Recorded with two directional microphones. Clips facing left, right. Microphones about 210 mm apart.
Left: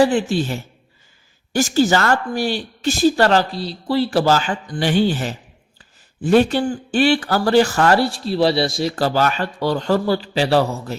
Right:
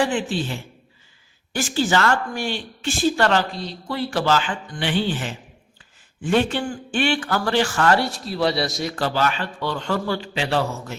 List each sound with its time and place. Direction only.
0.0 s speech: 40° left (ahead or behind)